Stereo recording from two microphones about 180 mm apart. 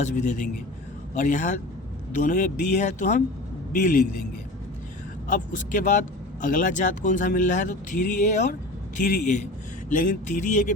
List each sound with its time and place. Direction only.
0.0 s a man's voice: 40° left (ahead or behind)
5.3 s speech: 45° left (ahead or behind)